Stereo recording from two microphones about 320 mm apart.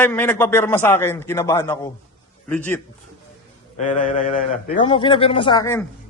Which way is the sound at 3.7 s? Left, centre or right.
Left.